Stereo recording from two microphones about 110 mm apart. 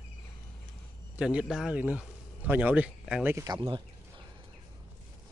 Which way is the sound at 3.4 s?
40° right (ahead or behind).